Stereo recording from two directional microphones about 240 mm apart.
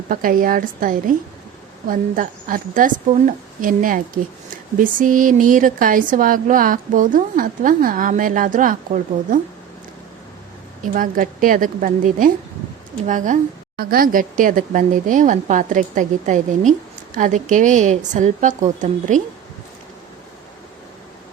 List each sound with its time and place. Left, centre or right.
0.1 s a woman's voice: right
10.9 s a woman's voice: right